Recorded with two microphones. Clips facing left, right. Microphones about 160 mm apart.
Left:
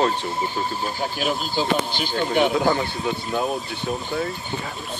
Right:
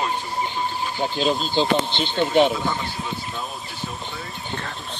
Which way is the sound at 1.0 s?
25° right (ahead or behind).